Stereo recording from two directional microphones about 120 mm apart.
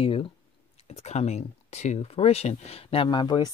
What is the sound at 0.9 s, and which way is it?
Speech, 65° left (ahead or behind).